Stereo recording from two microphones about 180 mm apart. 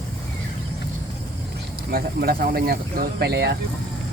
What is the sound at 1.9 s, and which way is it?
Speech, 55° right (ahead or behind).